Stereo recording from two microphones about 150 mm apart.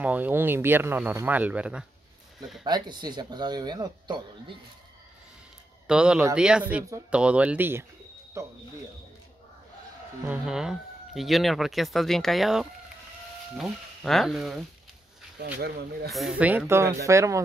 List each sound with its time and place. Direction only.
0.0 s speech: 10° right (ahead or behind)
2.6 s speech: 30° right (ahead or behind)
5.9 s speech: 5° right (ahead or behind)
10.2 s speech: 5° right (ahead or behind)
15.3 s speech: 85° right
16.1 s speech: centre (ahead or behind); by 17.4 s 20° right (ahead or behind)